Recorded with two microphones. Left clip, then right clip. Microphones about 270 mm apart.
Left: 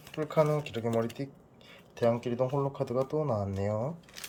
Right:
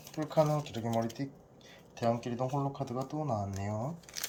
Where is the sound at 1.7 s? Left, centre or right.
Centre.